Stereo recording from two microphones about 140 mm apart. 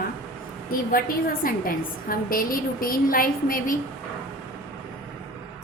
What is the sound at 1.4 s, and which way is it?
A woman's voice, 90° left.